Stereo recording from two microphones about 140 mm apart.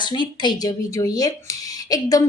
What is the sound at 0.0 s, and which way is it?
Speech, 35° left (ahead or behind).